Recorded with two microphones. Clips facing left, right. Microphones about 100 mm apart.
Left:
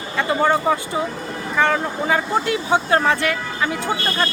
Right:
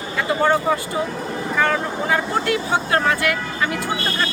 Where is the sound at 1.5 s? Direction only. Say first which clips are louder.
Left 2 dB; 20° left (ahead or behind).